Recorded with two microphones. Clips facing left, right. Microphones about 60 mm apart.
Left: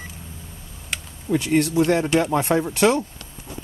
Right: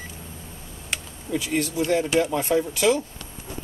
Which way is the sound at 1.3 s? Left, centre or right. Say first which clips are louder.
Left 6 dB; left.